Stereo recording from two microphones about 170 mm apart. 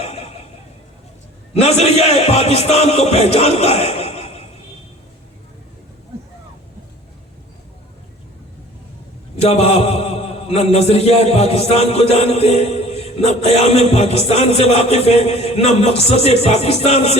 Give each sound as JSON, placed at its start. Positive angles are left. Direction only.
{"t": 0.0, "sound": "vehicle", "side_deg": 35}
{"t": 1.6, "sound": "a man's voice", "side_deg": 40}
{"t": 9.4, "sound": "a man's voice", "side_deg": 40}